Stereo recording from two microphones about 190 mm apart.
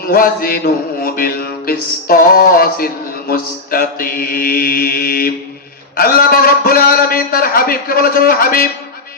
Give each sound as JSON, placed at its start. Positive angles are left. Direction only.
{"t": 0.0, "sound": "mantra", "side_deg": 50}